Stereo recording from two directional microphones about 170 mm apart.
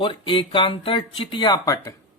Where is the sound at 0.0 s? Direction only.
30° left (ahead or behind).